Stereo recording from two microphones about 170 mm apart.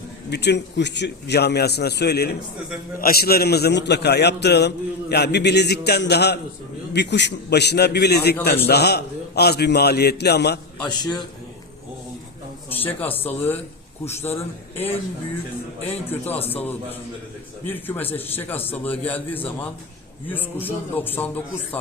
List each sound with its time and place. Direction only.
0.3 s a man's voice: 85° left
6.9 s a man's voice: 90° left; by 10.6 s 75° left (ahead or behind)
10.8 s a man's voice: 25° left (ahead or behind)
12.7 s a man's voice: 10° left (ahead or behind)
15.8 s a man's voice: 10° left (ahead or behind)